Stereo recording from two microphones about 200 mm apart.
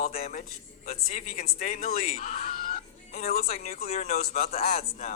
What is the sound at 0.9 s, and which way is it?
Speech, 30° left (ahead or behind).